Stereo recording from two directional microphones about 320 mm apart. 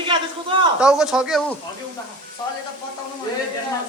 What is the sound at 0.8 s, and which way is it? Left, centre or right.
Speech, centre.